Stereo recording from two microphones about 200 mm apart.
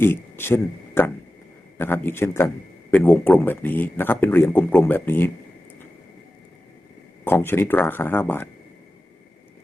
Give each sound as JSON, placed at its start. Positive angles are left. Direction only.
{"t": 0.0, "sound": "speech", "side_deg": 10}
{"t": 7.3, "sound": "speech", "side_deg": 10}